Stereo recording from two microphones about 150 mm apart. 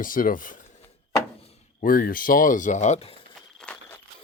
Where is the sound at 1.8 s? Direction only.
70° left (ahead or behind); by 3.2 s 40° left (ahead or behind).